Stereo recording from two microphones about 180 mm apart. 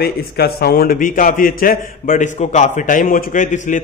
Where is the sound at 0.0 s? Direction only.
60° left (ahead or behind).